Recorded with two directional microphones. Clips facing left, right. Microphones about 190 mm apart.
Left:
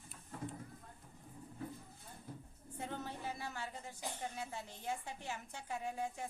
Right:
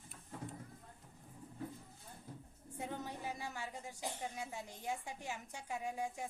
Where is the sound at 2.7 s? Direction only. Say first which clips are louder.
Even; 15° right (ahead or behind).